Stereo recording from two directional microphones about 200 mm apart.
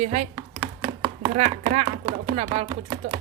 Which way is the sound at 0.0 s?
35° right (ahead or behind).